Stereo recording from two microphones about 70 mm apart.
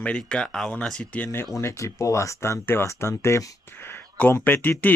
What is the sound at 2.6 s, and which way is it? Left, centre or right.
Speech, left.